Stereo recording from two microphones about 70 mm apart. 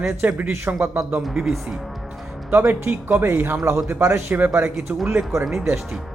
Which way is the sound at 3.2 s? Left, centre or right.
Right.